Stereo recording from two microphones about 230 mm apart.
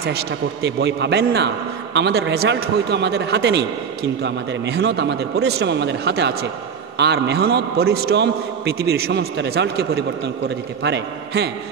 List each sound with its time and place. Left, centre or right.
0.0 s a man's voice: right